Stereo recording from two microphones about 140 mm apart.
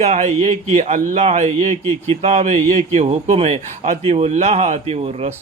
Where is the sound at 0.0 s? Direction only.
50° right (ahead or behind).